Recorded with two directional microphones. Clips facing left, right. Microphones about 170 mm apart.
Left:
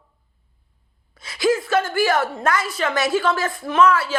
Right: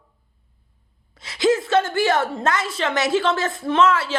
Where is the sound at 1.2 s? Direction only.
25° right (ahead or behind).